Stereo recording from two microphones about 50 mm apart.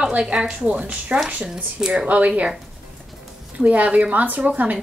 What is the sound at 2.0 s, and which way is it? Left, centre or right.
Speech, right.